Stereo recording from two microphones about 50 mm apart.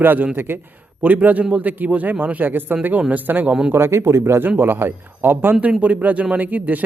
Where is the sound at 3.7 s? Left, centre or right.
Right.